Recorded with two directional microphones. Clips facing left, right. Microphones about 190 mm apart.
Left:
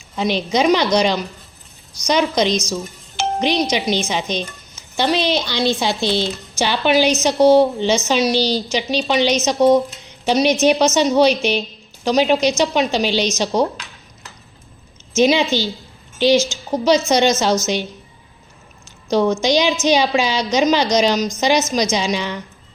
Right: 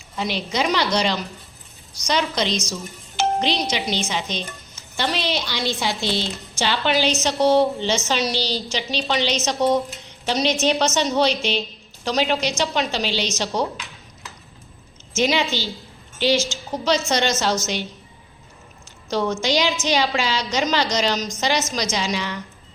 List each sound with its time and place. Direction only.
0.2 s a woman's voice: 20° left (ahead or behind)
15.1 s a woman's voice: 15° left (ahead or behind)
19.1 s a woman's voice: 20° left (ahead or behind)